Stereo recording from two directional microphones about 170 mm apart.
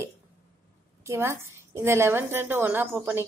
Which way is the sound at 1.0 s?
15° right (ahead or behind).